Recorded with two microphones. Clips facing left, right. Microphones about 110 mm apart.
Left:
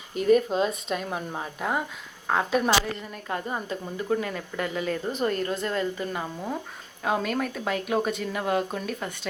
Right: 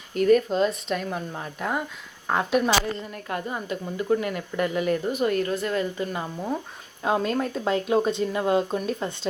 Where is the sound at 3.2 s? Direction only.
25° left (ahead or behind).